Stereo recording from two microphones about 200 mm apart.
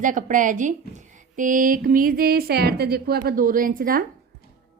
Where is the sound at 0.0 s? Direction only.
40° right (ahead or behind).